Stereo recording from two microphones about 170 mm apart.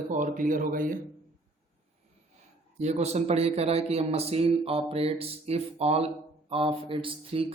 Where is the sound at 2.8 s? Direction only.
40° right (ahead or behind).